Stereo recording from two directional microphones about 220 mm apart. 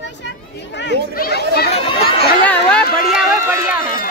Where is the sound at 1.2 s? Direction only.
45° left (ahead or behind).